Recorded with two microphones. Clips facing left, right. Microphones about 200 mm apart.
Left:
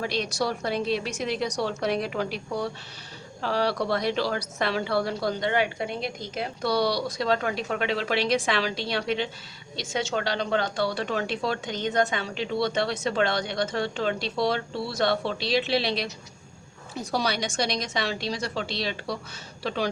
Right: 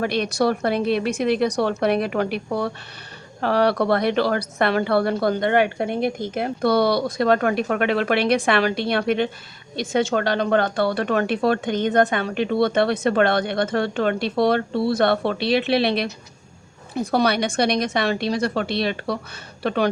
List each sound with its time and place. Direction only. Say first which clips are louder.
0.0 s a woman's voice: right 7 dB; 60° right (ahead or behind)